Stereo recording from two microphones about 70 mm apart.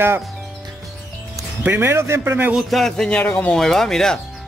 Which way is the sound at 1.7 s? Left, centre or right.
Right.